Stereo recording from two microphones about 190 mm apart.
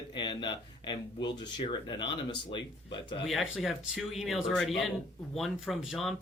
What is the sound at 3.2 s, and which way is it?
Speech, centre (ahead or behind).